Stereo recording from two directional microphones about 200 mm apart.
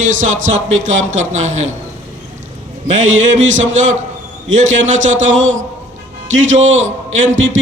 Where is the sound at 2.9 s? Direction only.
35° right (ahead or behind).